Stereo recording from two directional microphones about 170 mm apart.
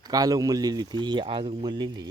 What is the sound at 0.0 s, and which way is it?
Speech, 20° right (ahead or behind).